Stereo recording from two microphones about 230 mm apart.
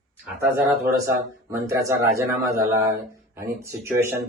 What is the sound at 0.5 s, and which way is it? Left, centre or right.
Speech, centre.